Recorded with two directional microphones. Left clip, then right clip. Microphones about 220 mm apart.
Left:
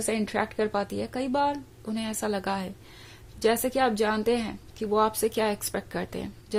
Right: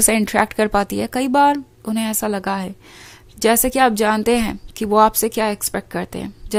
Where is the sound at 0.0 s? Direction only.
35° right (ahead or behind).